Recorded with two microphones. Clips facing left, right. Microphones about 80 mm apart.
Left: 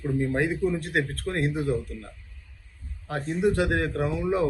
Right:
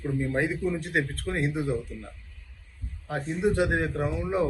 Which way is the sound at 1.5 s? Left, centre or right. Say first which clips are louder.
Left 2 dB; centre.